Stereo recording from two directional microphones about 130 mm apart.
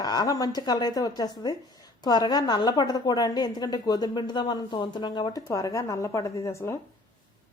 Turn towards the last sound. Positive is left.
turn(degrees=25)  # may be behind; listen again after turning